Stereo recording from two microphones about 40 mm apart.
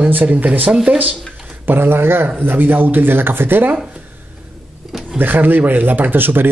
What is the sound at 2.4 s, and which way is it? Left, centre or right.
Speech, right.